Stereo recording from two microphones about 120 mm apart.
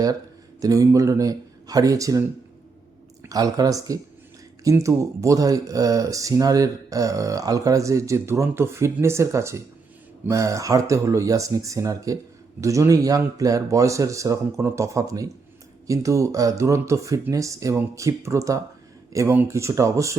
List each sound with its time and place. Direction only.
0.6 s speech: 30° right (ahead or behind)
3.2 s speech: 30° right (ahead or behind)